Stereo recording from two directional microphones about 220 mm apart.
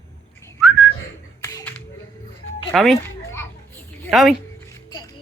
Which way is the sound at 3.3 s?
10° left (ahead or behind).